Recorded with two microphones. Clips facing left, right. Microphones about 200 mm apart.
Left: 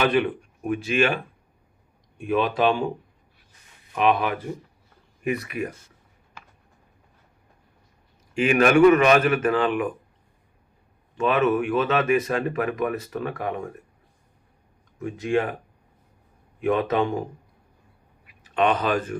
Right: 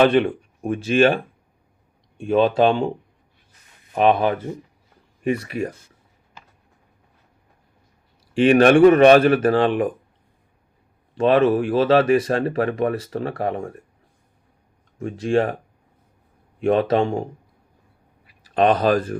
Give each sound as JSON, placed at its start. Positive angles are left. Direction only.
{"t": 0.0, "sound": "speech", "side_deg": -30}
{"t": 3.9, "sound": "speech", "side_deg": -35}
{"t": 8.3, "sound": "speech", "side_deg": -30}
{"t": 11.1, "sound": "speech", "side_deg": -35}
{"t": 14.9, "sound": "speech", "side_deg": -30}
{"t": 16.6, "sound": "a man's voice", "side_deg": -35}
{"t": 18.3, "sound": "speech", "side_deg": -35}